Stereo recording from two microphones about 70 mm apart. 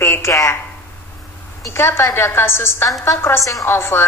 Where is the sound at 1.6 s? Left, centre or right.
Left.